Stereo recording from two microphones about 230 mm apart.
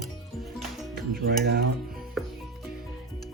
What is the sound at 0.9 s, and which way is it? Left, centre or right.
Speech, right.